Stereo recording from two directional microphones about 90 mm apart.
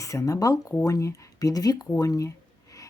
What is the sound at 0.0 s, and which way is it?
A woman's voice, 35° left (ahead or behind).